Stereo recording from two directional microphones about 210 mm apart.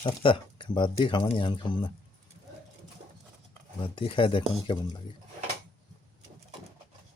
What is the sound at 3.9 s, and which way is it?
Speech, 25° left (ahead or behind).